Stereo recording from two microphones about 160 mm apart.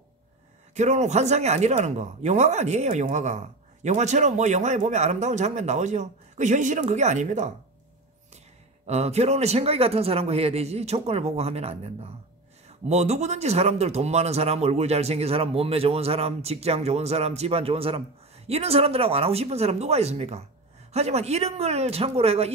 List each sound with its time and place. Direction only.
0.7 s speech: 45° right (ahead or behind)
8.8 s speech: 40° right (ahead or behind)